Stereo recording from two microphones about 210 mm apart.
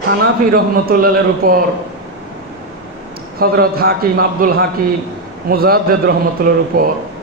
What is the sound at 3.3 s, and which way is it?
A man's voice, 45° right (ahead or behind).